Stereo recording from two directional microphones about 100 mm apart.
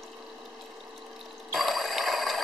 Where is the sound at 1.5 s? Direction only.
Centre (ahead or behind).